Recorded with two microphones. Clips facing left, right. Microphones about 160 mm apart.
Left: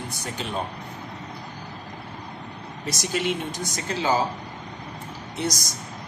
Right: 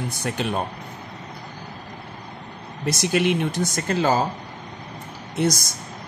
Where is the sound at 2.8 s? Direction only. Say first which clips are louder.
Right 6 dB; 60° right (ahead or behind).